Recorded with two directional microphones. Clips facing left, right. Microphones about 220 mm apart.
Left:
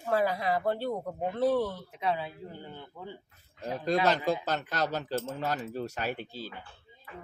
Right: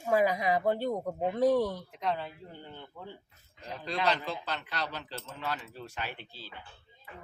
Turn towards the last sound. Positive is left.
turn(degrees=45)  # may be behind; listen again after turning